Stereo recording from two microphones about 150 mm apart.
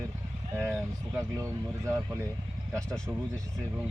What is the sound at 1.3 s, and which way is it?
Speech, 20° right (ahead or behind).